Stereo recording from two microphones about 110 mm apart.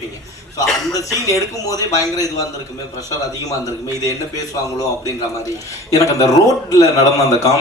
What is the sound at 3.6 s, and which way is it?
A man's voice, 30° left (ahead or behind).